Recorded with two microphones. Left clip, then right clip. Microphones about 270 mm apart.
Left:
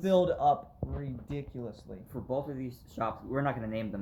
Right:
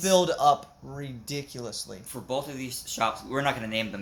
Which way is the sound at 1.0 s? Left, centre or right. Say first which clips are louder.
Right 8 dB; right.